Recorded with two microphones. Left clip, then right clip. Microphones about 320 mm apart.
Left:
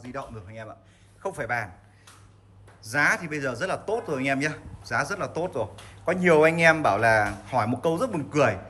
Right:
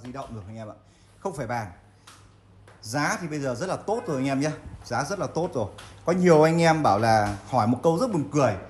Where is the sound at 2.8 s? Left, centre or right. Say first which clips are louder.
Left 4 dB; centre.